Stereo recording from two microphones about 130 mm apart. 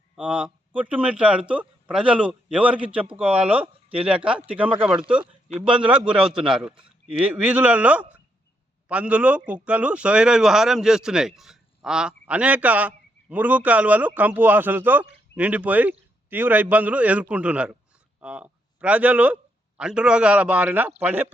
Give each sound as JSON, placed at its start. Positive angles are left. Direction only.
{"t": 0.2, "sound": "a man's voice", "side_deg": -10}